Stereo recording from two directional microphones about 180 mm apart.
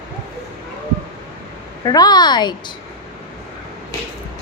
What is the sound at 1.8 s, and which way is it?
Speech, 20° left (ahead or behind).